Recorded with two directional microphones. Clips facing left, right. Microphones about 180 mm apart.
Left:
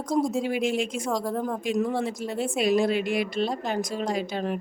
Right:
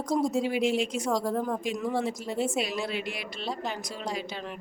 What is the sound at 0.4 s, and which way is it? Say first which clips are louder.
Speech: left 1 dB; 50° left (ahead or behind).